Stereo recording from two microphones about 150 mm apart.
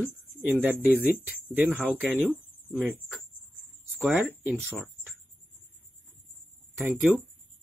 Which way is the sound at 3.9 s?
10° right (ahead or behind).